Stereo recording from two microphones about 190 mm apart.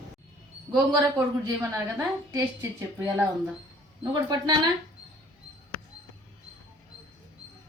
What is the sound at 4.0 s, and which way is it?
Speech, 20° right (ahead or behind).